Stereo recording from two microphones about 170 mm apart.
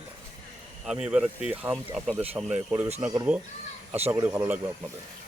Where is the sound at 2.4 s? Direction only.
15° right (ahead or behind).